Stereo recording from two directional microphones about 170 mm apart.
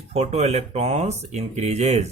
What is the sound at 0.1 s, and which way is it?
Speech, 40° right (ahead or behind).